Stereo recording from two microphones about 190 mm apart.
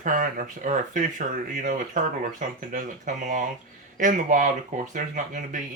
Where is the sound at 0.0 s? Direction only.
45° right (ahead or behind).